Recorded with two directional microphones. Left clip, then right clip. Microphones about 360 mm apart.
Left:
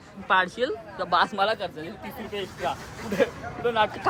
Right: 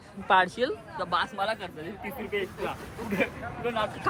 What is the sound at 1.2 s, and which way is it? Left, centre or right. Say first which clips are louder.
Speech: left 6 dB; centre.